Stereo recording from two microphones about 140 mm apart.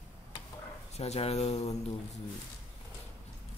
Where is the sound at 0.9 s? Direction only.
50° left (ahead or behind).